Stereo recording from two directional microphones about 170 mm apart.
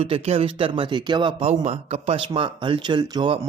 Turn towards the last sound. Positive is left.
turn(degrees=-25)  # may be behind; listen again after turning